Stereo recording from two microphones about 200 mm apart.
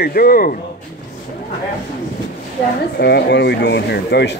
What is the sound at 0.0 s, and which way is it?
Speech, 50° left (ahead or behind).